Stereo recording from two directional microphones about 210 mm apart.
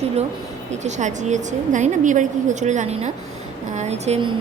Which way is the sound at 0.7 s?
35° right (ahead or behind).